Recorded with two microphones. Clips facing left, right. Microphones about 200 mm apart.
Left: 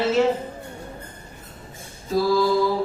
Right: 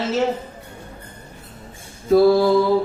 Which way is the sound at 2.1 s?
60° right (ahead or behind).